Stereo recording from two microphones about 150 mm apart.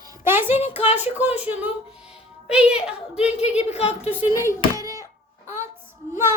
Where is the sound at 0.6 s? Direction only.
45° left (ahead or behind).